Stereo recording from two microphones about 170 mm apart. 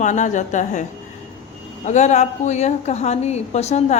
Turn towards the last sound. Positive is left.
turn(degrees=40)  # may be behind; listen again after turning